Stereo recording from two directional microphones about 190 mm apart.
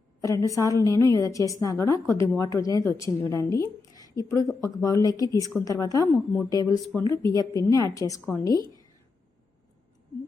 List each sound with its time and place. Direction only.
0.2 s a woman's voice: 15° left (ahead or behind)